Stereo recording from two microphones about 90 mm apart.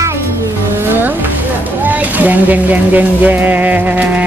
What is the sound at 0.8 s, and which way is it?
Music, 25° right (ahead or behind).